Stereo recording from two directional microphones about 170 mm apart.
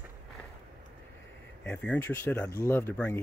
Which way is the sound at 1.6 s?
10° left (ahead or behind).